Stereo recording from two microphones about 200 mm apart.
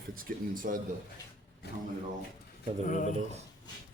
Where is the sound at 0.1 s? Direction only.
45° right (ahead or behind).